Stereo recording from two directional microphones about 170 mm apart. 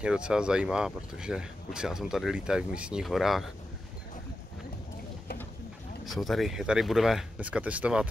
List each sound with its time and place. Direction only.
0.0 s speech: 5° right (ahead or behind)
6.0 s speech: centre (ahead or behind)